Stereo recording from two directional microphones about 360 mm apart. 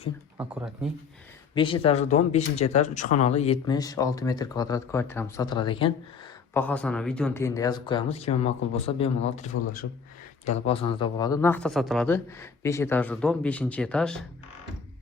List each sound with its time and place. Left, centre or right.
0.3 s speech: centre
1.5 s speech: centre
9.8 s speech: left
10.4 s speech: centre